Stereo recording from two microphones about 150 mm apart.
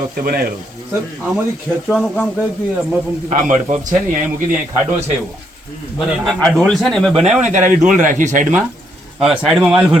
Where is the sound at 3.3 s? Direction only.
55° right (ahead or behind).